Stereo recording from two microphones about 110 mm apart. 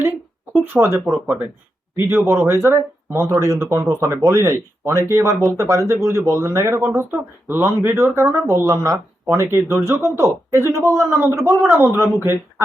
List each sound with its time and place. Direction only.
0.5 s speech: 15° right (ahead or behind)